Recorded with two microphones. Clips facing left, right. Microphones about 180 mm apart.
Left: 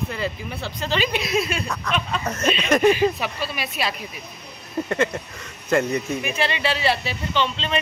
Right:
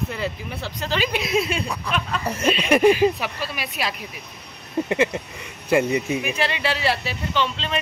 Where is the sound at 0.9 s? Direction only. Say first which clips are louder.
Even; 10° right (ahead or behind).